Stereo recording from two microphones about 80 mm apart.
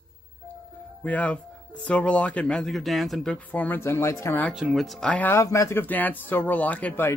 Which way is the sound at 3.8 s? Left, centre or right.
Left.